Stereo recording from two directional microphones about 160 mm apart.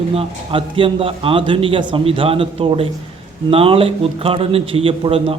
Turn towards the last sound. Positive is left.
turn(degrees=-35)  # may be behind; listen again after turning